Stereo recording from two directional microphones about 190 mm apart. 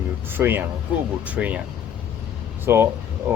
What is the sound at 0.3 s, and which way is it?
Speech, 10° right (ahead or behind).